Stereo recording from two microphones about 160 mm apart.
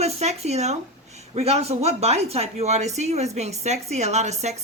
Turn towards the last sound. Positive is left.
turn(degrees=-45)  # may be behind; listen again after turning